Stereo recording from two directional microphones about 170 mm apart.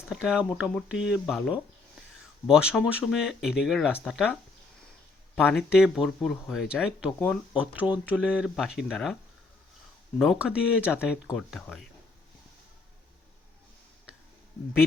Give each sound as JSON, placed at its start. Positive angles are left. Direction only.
{"t": 0.1, "sound": "speech", "side_deg": -5}
{"t": 10.2, "sound": "speech", "side_deg": -5}